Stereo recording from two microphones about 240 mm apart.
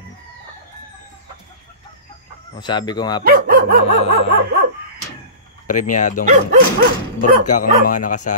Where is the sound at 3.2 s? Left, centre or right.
Right.